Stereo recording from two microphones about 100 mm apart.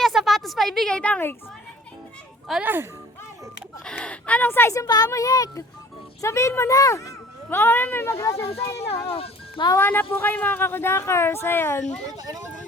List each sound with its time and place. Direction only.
0.0 s a sound: centre (ahead or behind)
2.5 s speech: centre (ahead or behind)
3.8 s speech: 10° left (ahead or behind)
8.2 s speech: 35° left (ahead or behind)
8.7 s speech: 90° left
9.1 s music: 70° left (ahead or behind)
9.7 s speech: 20° left (ahead or behind)
12.1 s speech: 35° right (ahead or behind)